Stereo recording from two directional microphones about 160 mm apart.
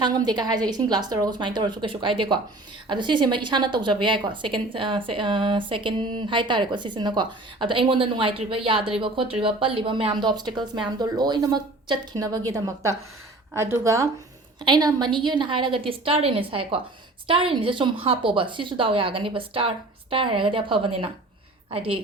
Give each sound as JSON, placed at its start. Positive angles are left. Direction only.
{"t": 0.0, "sound": "a woman's voice", "side_deg": -25}